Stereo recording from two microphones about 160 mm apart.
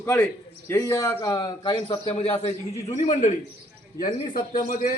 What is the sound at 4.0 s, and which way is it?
Speech, 60° left (ahead or behind).